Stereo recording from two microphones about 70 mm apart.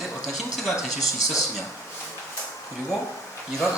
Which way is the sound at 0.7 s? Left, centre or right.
Left.